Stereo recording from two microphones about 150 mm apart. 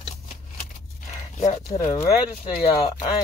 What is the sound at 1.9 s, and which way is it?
Speech, 25° left (ahead or behind).